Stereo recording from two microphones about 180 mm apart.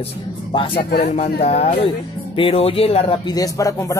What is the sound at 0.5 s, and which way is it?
Speech, 30° left (ahead or behind).